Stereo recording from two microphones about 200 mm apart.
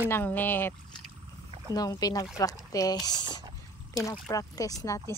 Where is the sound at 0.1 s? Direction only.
10° left (ahead or behind).